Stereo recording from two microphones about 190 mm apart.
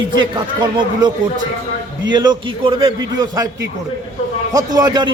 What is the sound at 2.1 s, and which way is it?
A man's voice, 25° right (ahead or behind).